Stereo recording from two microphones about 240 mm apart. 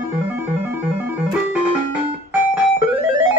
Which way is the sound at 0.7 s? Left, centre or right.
Centre.